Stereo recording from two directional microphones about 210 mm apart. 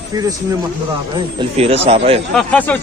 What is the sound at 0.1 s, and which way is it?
Speech, 20° right (ahead or behind).